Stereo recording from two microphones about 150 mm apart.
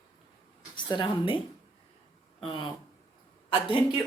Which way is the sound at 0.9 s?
30° left (ahead or behind).